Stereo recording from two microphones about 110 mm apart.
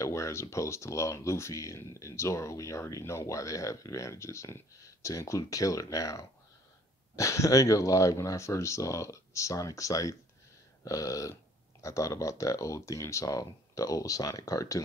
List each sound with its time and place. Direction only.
0.0 s speech: 25° left (ahead or behind)